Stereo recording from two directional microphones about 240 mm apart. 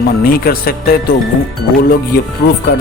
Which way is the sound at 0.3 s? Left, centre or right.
Left.